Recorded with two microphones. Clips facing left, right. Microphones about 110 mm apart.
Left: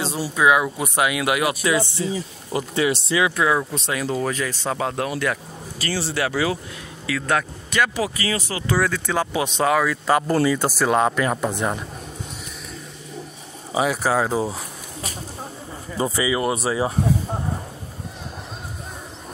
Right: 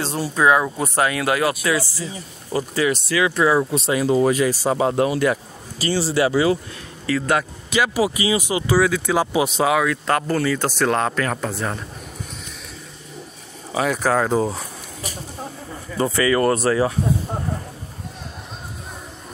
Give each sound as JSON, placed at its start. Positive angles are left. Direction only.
{"t": 0.2, "sound": "speech", "side_deg": 10}
{"t": 3.3, "sound": "speech", "side_deg": -5}
{"t": 8.7, "sound": "speech", "side_deg": -5}
{"t": 13.8, "sound": "speech", "side_deg": 5}
{"t": 16.0, "sound": "speech", "side_deg": 10}